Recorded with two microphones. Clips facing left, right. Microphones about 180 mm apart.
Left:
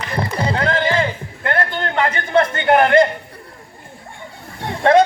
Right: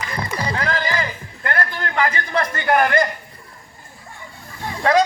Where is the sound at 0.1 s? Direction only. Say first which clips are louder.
Left 5 dB; 30° left (ahead or behind).